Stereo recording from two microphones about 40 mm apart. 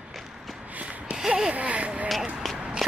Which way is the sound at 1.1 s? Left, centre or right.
Centre.